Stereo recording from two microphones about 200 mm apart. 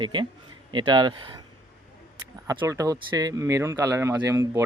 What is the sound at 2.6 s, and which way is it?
Speech, 15° right (ahead or behind).